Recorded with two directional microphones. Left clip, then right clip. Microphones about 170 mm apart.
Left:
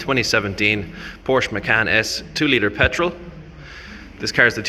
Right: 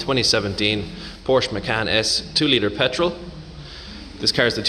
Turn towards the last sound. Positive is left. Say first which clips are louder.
# left 3 dB
turn(degrees=-10)  # may be behind; listen again after turning